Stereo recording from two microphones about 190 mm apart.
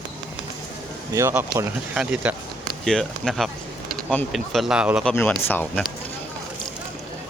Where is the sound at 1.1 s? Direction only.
15° right (ahead or behind).